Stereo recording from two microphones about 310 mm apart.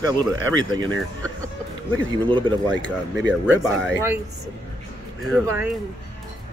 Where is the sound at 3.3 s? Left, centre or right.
Centre.